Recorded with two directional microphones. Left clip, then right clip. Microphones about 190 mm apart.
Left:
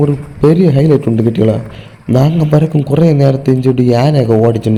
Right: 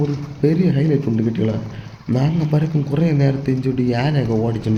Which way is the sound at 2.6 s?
35° left (ahead or behind).